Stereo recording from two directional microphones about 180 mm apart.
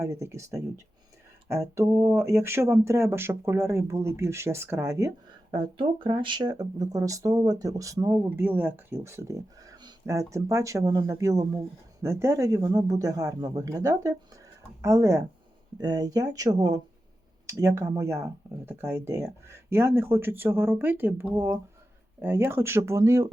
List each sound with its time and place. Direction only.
0.0 s speech: 15° right (ahead or behind)
5.5 s a man's voice: 25° right (ahead or behind)